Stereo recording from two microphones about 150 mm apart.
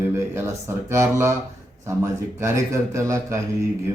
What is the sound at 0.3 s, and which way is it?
A man's voice, 15° right (ahead or behind).